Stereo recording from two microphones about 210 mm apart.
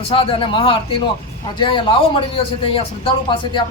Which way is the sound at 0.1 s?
25° left (ahead or behind).